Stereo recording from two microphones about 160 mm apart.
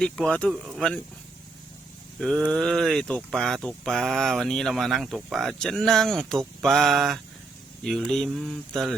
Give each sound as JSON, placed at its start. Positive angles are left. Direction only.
{"t": 0.0, "sound": "speech", "side_deg": 5}
{"t": 2.5, "sound": "speech", "side_deg": 0}